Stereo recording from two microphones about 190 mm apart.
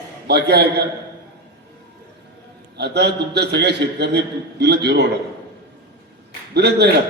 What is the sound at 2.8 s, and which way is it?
A man's voice, 60° right (ahead or behind).